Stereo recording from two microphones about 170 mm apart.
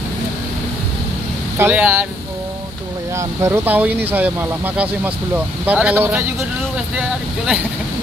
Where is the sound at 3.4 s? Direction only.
15° right (ahead or behind).